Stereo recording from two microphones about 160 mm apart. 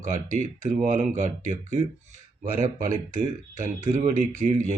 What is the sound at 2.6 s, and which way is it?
Speech, 55° right (ahead or behind).